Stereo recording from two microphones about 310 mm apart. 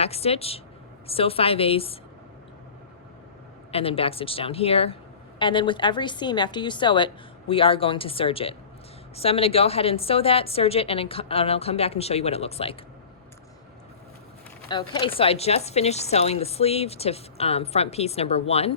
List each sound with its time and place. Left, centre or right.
0.0 s a woman's voice: centre
3.7 s a woman's voice: centre
14.7 s speech: centre